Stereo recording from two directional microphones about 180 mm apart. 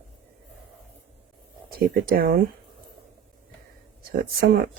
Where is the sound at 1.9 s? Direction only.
55° right (ahead or behind).